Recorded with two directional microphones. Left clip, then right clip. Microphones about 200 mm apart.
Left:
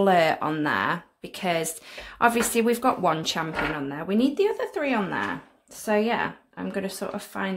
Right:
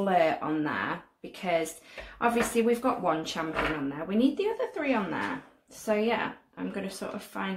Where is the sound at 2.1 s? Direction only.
50° left (ahead or behind).